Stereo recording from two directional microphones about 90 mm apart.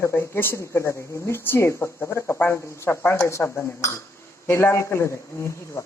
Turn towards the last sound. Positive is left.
turn(degrees=30)  # may be behind; listen again after turning